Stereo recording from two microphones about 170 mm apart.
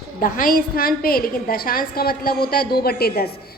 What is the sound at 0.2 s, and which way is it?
A woman's voice, 55° left (ahead or behind).